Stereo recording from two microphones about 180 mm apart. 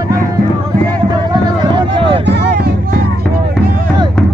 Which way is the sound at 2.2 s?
70° right (ahead or behind).